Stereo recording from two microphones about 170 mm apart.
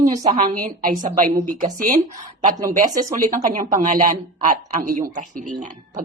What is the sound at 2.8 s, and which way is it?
Speech, 20° right (ahead or behind).